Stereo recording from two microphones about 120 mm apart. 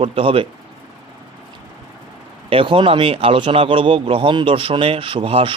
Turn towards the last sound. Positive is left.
turn(degrees=-50)  # may be behind; listen again after turning